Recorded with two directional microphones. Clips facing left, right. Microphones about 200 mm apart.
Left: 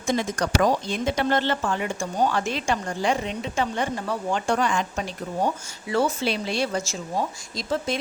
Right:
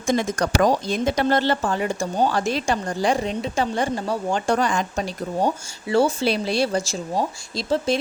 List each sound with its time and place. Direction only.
0.1 s speech: 45° right (ahead or behind)